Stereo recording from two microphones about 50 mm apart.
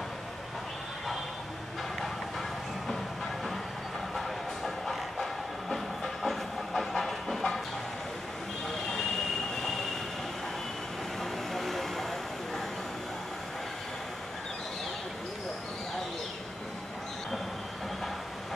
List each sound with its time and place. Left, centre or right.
4.1 s train: centre
11.1 s vehicle: centre